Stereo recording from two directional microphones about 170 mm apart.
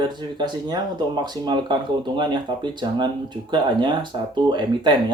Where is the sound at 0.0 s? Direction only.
25° right (ahead or behind).